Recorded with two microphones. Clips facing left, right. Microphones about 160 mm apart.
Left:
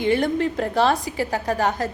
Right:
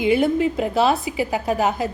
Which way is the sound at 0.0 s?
5° right (ahead or behind).